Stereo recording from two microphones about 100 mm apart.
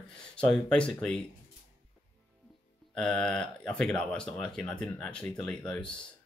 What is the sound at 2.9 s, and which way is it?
Speech, 5° left (ahead or behind).